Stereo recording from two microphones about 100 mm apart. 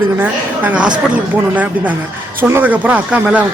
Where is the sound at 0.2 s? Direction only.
15° right (ahead or behind).